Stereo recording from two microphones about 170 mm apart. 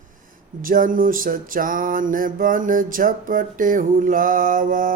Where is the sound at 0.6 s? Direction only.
55° right (ahead or behind).